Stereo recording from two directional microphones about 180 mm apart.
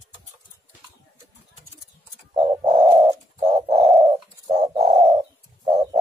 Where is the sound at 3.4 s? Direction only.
30° right (ahead or behind).